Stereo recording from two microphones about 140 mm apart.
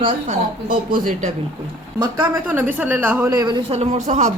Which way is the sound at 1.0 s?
70° right (ahead or behind).